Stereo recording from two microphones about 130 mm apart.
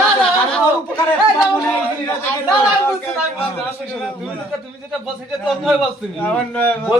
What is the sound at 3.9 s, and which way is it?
Speech, 5° left (ahead or behind).